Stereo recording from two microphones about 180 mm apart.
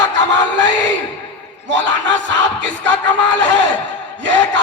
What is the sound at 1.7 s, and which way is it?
Speech, 90° right.